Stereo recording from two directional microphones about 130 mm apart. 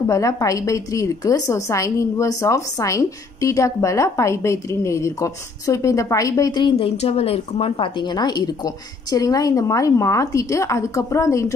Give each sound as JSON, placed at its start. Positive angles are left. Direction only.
{"t": 0.0, "sound": "a woman's voice", "side_deg": 25}
{"t": 6.8, "sound": "a woman's voice", "side_deg": 55}